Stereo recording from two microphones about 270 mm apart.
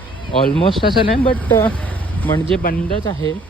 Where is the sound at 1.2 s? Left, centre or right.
Centre.